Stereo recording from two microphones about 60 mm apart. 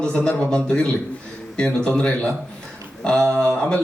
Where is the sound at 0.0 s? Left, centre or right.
Centre.